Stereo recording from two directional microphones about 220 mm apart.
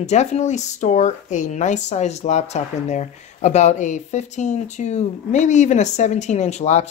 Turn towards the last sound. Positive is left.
turn(degrees=30)  # may be behind; listen again after turning